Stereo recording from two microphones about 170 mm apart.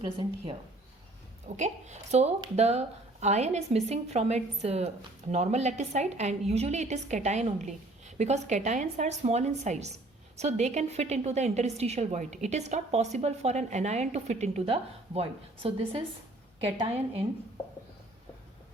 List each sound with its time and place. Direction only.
0.0 s speech: 30° right (ahead or behind)
1.5 s a woman's voice: 45° right (ahead or behind)